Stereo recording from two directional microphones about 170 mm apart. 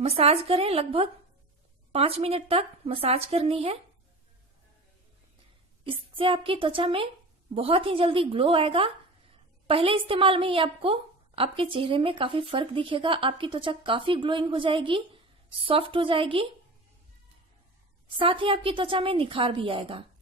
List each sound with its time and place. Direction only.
0.0 s a woman's voice: 35° right (ahead or behind)
5.9 s a woman's voice: 30° right (ahead or behind)
18.0 s a woman's voice: 30° right (ahead or behind)